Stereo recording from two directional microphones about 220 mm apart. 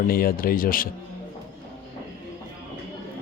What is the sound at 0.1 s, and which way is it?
Speech, 40° left (ahead or behind).